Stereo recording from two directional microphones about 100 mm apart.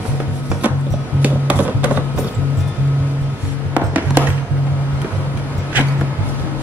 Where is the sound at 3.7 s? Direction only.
15° right (ahead or behind).